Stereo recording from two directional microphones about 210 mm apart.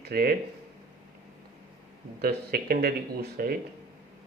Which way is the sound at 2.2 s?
45° right (ahead or behind).